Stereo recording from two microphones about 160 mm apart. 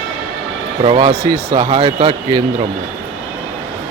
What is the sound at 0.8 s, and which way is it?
Speech, 35° right (ahead or behind).